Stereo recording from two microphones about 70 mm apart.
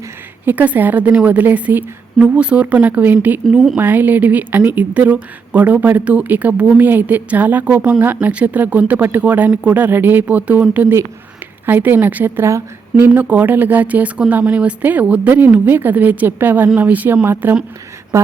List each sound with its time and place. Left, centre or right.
0.4 s speech: right
11.6 s speech: right
18.1 s a sound: right